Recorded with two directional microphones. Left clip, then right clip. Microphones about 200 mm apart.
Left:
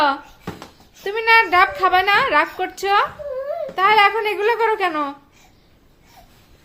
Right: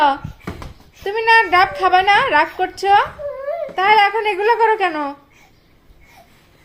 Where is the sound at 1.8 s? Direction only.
10° left (ahead or behind).